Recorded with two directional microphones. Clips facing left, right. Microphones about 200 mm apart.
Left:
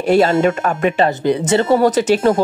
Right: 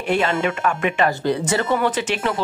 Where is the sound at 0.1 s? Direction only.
40° left (ahead or behind).